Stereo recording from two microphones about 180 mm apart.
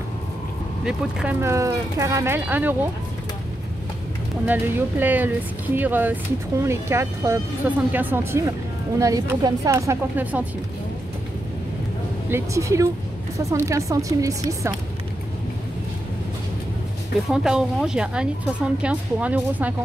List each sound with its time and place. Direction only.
0.8 s speech: 10° right (ahead or behind)
4.5 s speech: 10° right (ahead or behind)
12.3 s speech: 15° right (ahead or behind)
17.3 s a woman's voice: 5° right (ahead or behind)